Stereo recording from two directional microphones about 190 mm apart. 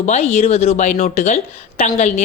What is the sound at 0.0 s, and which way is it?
A woman's voice, 35° left (ahead or behind).